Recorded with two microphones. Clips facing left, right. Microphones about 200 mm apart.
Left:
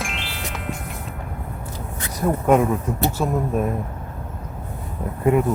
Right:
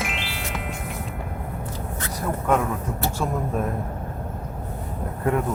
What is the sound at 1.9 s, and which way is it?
Speech, 15° left (ahead or behind).